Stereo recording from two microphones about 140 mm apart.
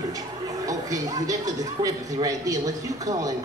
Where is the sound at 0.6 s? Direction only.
25° right (ahead or behind).